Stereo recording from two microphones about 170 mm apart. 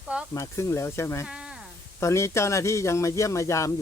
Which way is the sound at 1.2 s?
5° right (ahead or behind).